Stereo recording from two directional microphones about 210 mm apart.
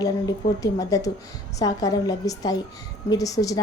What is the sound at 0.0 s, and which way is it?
A woman's voice, 15° left (ahead or behind).